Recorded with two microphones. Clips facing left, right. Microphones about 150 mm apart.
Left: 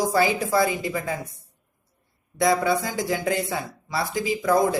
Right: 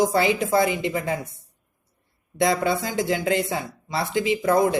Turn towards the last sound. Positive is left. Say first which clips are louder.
# right 1 dB
turn(degrees=-25)  # may be behind; listen again after turning